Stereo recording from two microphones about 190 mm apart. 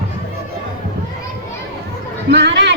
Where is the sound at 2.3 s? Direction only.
65° right (ahead or behind).